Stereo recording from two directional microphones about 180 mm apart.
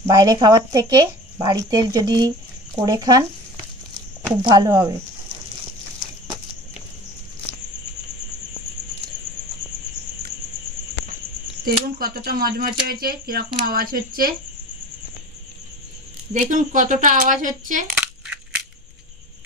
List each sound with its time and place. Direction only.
0.0 s speech: 20° right (ahead or behind)
4.4 s speech: 25° right (ahead or behind)
11.6 s speech: 55° right (ahead or behind)
16.4 s a woman's voice: 45° right (ahead or behind)
18.2 s crushing: 5° right (ahead or behind)